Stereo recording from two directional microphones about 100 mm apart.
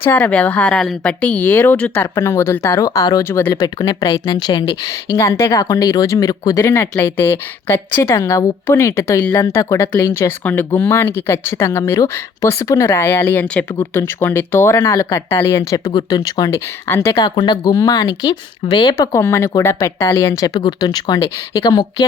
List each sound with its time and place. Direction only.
0.0 s speech: 15° left (ahead or behind)
2.1 s speech: 30° left (ahead or behind)
2.8 s speech: 40° left (ahead or behind)
3.2 s speech: 25° left (ahead or behind)
3.6 s speech: 45° left (ahead or behind)
4.9 s speech: 30° left (ahead or behind)
10.4 s speech: 20° left (ahead or behind)
13.7 s speech: 25° left (ahead or behind)
17.2 s speech: 50° left (ahead or behind)
19.1 s speech: 25° left (ahead or behind); by 22.0 s 45° left (ahead or behind)